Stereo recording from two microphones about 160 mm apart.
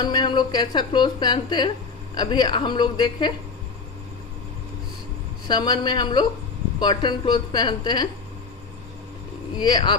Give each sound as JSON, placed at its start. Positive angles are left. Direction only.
{"t": 0.0, "sound": "speech", "side_deg": 30}
{"t": 5.5, "sound": "speech", "side_deg": 25}
{"t": 9.6, "sound": "speech", "side_deg": 30}